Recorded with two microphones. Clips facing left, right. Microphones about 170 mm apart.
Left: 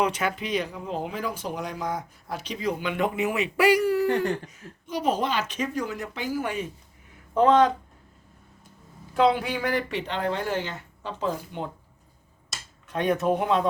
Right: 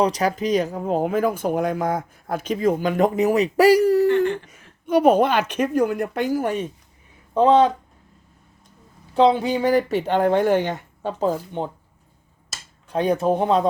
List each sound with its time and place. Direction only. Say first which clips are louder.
0.0 s speech: right 6 dB; 35° right (ahead or behind)
4.0 s speech: right 6 dB; 40° left (ahead or behind)
4.5 s a woman's voice: right 12 dB; 60° right (ahead or behind); by 6.7 s 40° right (ahead or behind)
9.1 s speech: right 5 dB; 25° right (ahead or behind)
10.1 s speech: right 12 dB; 55° right (ahead or behind)
12.9 s speech: right 4 dB; 30° right (ahead or behind)